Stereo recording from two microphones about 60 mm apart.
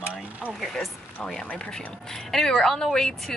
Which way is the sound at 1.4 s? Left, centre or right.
Centre.